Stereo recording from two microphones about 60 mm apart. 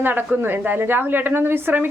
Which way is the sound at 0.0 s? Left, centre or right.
Right.